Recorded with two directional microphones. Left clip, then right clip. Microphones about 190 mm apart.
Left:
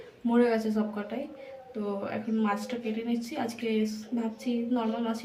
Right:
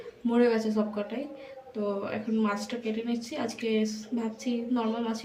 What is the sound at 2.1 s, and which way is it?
A woman's voice, 15° left (ahead or behind).